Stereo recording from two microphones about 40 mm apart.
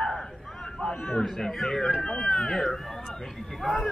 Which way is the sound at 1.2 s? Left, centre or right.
Centre.